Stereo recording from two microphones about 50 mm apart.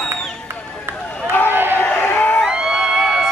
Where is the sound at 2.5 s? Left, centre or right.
Centre.